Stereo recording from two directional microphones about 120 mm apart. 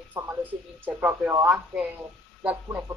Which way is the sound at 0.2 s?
25° right (ahead or behind).